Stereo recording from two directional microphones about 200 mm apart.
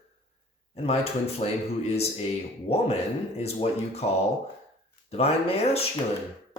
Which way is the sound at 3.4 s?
30° left (ahead or behind).